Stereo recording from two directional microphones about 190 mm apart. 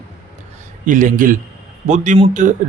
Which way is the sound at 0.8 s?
45° right (ahead or behind).